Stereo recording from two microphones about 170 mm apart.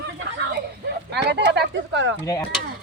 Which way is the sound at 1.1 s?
85° right.